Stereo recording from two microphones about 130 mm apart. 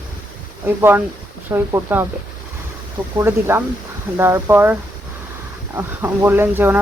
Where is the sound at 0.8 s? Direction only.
15° right (ahead or behind).